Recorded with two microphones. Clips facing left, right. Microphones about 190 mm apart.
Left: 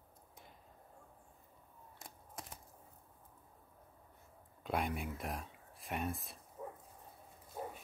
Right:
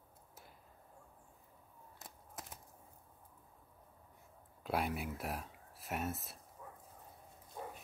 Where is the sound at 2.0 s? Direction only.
5° right (ahead or behind).